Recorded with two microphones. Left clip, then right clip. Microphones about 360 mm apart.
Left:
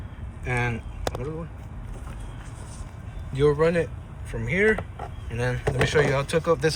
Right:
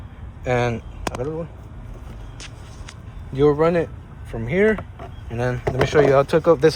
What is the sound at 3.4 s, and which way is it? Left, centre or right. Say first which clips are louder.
Speech: right 4 dB; centre.